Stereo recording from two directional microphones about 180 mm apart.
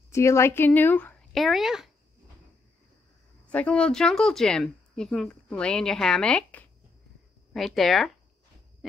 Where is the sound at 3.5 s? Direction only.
5° left (ahead or behind).